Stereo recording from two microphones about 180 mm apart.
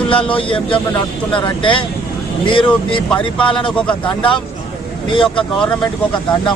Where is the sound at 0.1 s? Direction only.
30° left (ahead or behind).